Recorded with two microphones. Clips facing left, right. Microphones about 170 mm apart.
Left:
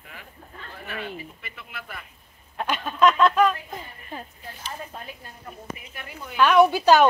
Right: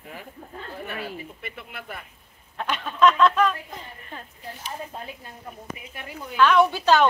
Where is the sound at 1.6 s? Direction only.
50° right (ahead or behind).